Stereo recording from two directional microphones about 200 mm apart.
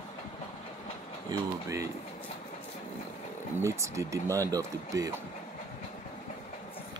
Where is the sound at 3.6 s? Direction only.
15° right (ahead or behind).